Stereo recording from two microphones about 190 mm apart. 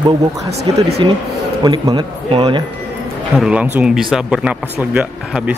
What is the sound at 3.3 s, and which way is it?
Speech, 5° right (ahead or behind).